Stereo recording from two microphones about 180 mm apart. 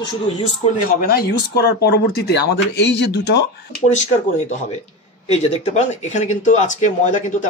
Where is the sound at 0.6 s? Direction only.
55° left (ahead or behind).